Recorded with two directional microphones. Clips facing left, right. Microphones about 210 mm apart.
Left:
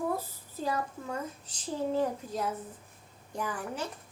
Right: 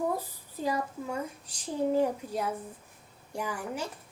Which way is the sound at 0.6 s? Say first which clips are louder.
Right 2 dB; 10° right (ahead or behind).